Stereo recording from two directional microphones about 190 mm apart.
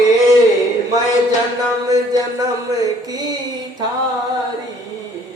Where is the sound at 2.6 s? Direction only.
20° right (ahead or behind).